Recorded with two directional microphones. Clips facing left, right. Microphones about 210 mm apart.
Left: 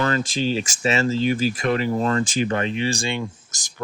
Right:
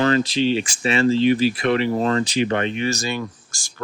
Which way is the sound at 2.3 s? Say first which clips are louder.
Right 2 dB; 50° left (ahead or behind).